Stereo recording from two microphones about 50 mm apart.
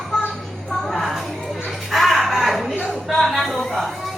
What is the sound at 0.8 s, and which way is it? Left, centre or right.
Music, centre.